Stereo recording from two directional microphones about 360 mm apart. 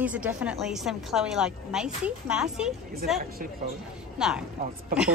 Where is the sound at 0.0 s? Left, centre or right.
Centre.